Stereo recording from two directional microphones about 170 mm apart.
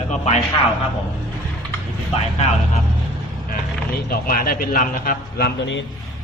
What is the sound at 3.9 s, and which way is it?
A man's voice, 60° left (ahead or behind).